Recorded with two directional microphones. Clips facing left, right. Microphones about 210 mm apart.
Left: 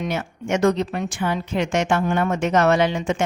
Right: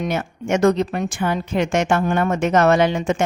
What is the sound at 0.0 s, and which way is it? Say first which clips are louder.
A woman's voice: right 3 dB; 50° right (ahead or behind).